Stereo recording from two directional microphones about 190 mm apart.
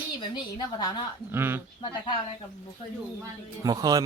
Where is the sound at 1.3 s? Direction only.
10° right (ahead or behind).